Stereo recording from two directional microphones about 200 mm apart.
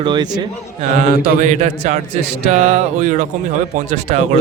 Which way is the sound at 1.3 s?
40° right (ahead or behind).